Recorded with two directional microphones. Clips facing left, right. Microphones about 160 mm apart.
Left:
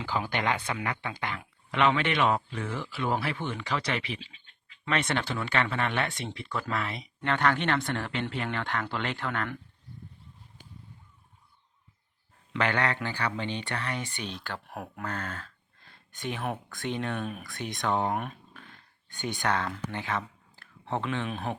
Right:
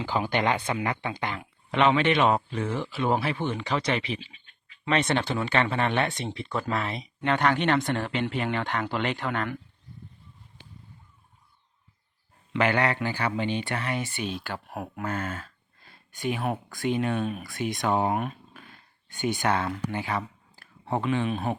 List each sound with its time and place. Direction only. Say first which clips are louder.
0.0 s speech: right 4 dB; 20° right (ahead or behind)
12.5 s speech: right 4 dB; 10° right (ahead or behind)
19.9 s a sound: right 3 dB; 5° right (ahead or behind)
21.2 s speech: right 5 dB; 5° right (ahead or behind)